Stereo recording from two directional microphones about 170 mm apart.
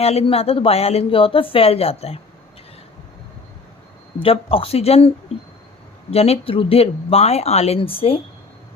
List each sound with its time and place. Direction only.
0.0 s speech: 35° left (ahead or behind)
4.2 s speech: 35° left (ahead or behind)